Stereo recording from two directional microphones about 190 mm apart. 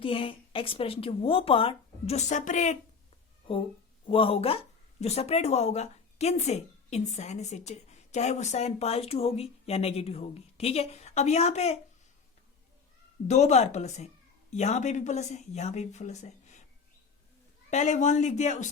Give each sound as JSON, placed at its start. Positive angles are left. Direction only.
{"t": 0.0, "sound": "speech", "side_deg": 30}
{"t": 4.0, "sound": "speech", "side_deg": 30}
{"t": 13.2, "sound": "speech", "side_deg": 35}
{"t": 17.7, "sound": "speech", "side_deg": 40}